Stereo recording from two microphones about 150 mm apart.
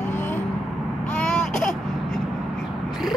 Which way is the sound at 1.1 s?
5° left (ahead or behind).